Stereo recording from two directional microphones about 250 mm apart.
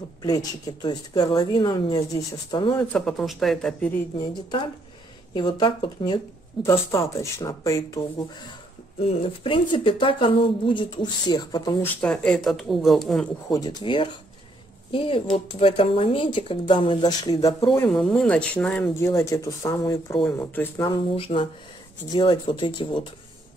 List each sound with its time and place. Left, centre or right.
0.2 s speech: centre
2.9 s speech: centre
5.3 s speech: centre
9.0 s speech: left; by 13.3 s centre
13.5 s speech: centre
17.8 s speech: centre